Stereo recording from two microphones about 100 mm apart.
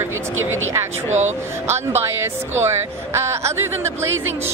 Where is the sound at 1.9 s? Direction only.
25° right (ahead or behind).